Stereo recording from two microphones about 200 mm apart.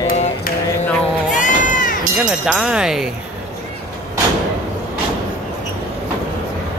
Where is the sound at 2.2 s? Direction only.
5° right (ahead or behind).